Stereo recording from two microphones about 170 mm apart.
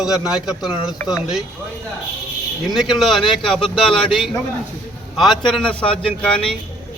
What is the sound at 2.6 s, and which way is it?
A man's voice, centre (ahead or behind).